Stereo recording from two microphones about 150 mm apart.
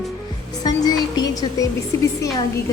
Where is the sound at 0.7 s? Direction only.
25° left (ahead or behind).